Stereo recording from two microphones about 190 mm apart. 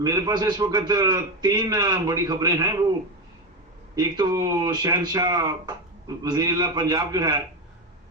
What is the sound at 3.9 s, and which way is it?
A man's voice, 20° right (ahead or behind).